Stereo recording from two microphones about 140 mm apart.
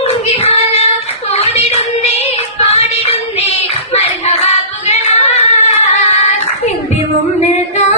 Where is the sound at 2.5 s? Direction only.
45° left (ahead or behind).